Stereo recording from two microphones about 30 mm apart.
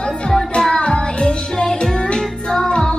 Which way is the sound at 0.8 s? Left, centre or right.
Left.